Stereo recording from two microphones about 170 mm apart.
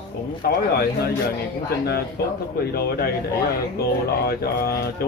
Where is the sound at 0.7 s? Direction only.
65° left (ahead or behind).